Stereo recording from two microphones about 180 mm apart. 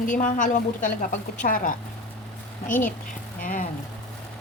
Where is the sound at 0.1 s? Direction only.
45° left (ahead or behind).